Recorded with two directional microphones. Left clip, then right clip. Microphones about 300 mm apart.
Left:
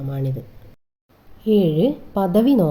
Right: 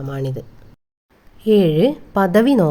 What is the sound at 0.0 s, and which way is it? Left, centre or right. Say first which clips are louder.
Speech: right 3 dB; right.